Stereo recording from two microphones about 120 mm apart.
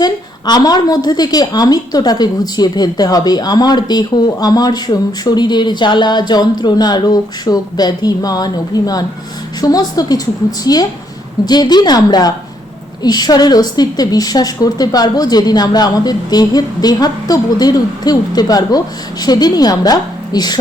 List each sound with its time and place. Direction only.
0.0 s a woman's voice: 35° left (ahead or behind)